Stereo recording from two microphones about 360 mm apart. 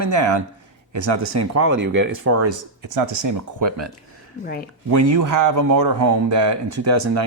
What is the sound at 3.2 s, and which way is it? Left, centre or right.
Speech, right.